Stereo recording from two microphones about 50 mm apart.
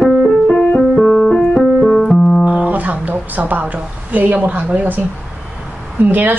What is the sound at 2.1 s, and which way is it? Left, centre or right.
Music, centre.